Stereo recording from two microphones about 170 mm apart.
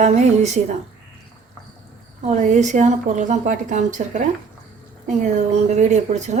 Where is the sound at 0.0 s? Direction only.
40° right (ahead or behind).